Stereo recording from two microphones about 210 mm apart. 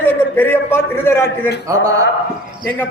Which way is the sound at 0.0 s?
10° left (ahead or behind).